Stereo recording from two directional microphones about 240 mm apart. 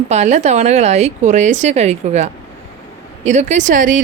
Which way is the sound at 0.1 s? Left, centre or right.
Right.